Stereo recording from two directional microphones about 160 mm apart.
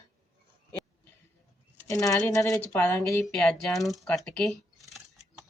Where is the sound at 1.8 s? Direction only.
20° left (ahead or behind).